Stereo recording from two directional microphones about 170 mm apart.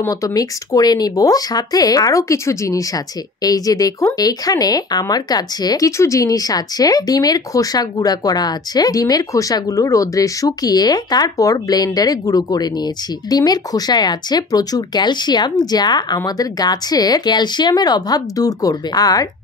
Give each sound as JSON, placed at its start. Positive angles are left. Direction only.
{"t": 0.0, "sound": "speech", "side_deg": 20}